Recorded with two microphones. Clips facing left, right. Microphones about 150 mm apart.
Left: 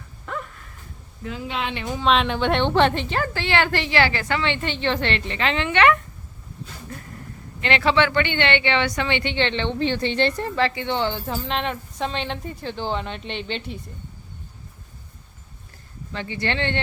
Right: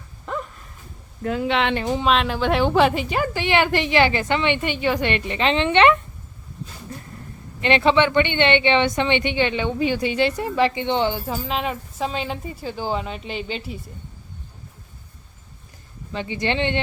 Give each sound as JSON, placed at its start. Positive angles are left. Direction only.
{"t": 1.2, "sound": "speech", "side_deg": -60}
{"t": 2.0, "sound": "a woman's voice", "side_deg": 0}
{"t": 7.6, "sound": "a woman's voice", "side_deg": -20}
{"t": 11.3, "sound": "a woman's voice", "side_deg": -5}
{"t": 16.1, "sound": "a woman's voice", "side_deg": -15}